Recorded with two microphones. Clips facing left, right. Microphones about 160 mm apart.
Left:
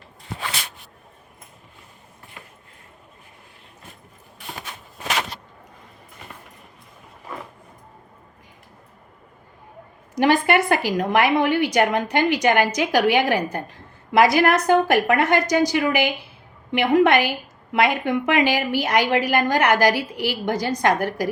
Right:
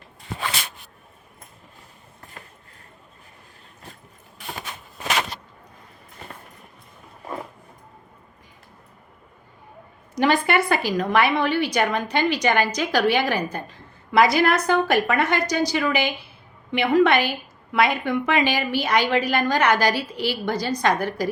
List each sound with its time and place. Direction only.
10.5 s a woman's voice: 15° left (ahead or behind)